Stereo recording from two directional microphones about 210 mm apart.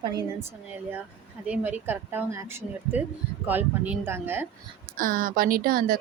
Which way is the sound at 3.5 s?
5° right (ahead or behind).